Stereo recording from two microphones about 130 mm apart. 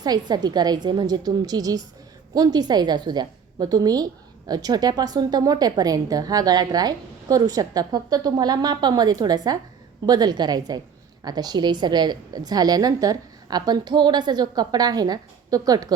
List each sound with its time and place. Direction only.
0.0 s a woman's voice: 30° right (ahead or behind)